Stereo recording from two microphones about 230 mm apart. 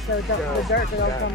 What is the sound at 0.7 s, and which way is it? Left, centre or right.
Speech, left.